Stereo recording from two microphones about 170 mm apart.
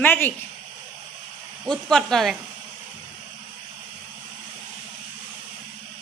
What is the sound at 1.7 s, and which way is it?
Speech, 5° left (ahead or behind).